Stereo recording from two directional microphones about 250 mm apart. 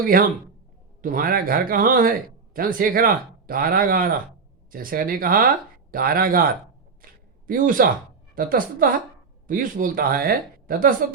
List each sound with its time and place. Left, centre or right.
0.0 s speech: right
7.0 s a sound: right
8.4 s speech: right